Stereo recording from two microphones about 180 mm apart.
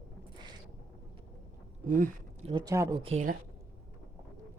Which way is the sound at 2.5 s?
25° right (ahead or behind).